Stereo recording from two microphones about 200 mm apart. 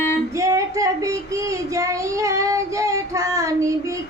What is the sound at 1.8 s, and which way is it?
Child singing, 15° right (ahead or behind).